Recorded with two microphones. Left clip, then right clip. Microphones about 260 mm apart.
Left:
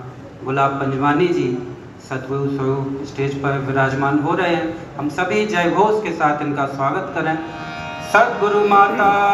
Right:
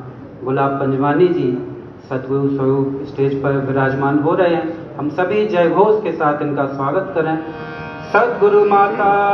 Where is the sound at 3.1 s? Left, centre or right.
Left.